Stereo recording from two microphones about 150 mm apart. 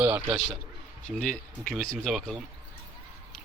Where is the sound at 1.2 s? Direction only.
5° left (ahead or behind).